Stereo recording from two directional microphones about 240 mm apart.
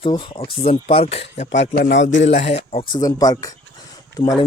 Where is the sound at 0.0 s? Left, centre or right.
Left.